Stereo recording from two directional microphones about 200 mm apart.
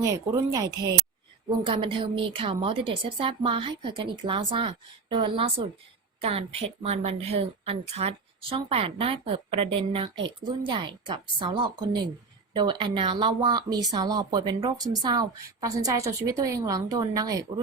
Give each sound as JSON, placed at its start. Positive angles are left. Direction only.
{"t": 0.0, "sound": "a woman's voice", "side_deg": -15}